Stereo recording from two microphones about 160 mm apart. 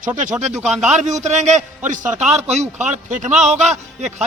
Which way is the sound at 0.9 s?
45° right (ahead or behind).